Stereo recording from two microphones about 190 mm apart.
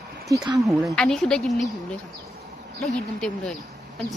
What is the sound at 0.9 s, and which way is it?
Speech, 5° left (ahead or behind).